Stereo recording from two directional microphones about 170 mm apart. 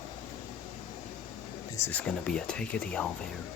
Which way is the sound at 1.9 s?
10° left (ahead or behind).